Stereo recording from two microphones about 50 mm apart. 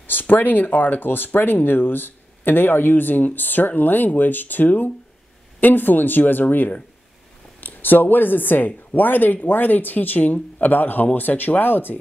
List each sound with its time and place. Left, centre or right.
0.0 s speech: left